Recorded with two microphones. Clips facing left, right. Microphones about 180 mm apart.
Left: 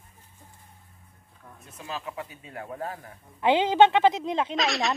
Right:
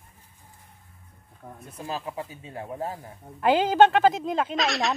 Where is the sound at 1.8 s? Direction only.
35° right (ahead or behind).